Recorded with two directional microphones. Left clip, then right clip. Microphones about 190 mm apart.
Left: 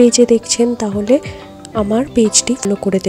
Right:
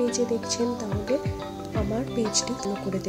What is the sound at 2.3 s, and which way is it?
Speech, 40° left (ahead or behind).